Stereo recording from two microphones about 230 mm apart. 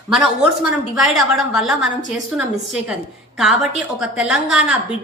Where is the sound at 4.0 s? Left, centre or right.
Centre.